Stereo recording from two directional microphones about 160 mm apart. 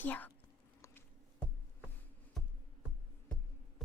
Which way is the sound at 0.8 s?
15° left (ahead or behind).